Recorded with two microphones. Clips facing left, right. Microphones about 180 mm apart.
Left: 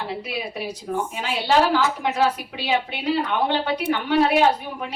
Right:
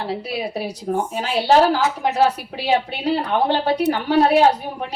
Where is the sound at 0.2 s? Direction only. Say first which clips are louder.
Right 4 dB; 35° right (ahead or behind).